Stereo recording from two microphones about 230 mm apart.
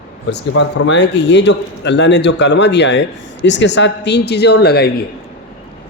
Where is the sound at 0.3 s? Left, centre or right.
Left.